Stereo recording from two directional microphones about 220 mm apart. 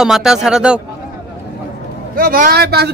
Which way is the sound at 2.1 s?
40° right (ahead or behind).